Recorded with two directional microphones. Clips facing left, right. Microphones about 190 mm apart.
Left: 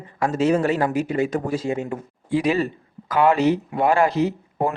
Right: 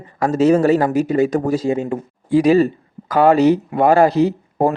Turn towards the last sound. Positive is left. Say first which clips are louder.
# right 6 dB
turn(degrees=-35)  # may be behind; listen again after turning